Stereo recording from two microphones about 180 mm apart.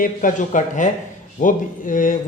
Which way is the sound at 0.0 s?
50° left (ahead or behind).